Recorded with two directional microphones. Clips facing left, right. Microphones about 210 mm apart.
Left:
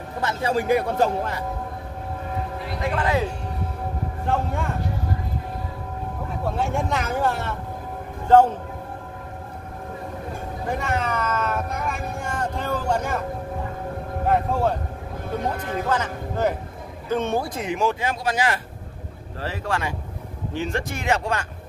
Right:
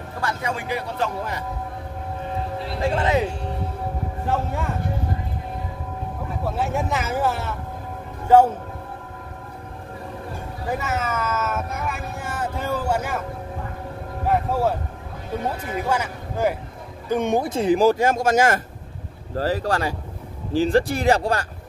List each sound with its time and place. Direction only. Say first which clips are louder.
0.2 s a man's voice: left 4 dB; 25° left (ahead or behind)
0.7 s speech: left 7 dB; 50° left (ahead or behind)
2.6 s speech: right 3 dB; 30° right (ahead or behind)
4.3 s speech: even; centre (ahead or behind)
6.4 s speech: even; 5° right (ahead or behind)
10.7 s speech: even; 5° right (ahead or behind)
14.2 s speech: even; 5° right (ahead or behind); by 21.5 s 35° right (ahead or behind)